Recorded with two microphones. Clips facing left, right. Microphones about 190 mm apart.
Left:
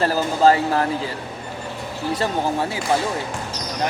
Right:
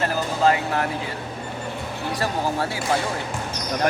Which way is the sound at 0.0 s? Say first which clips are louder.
Left 4 dB; 35° left (ahead or behind).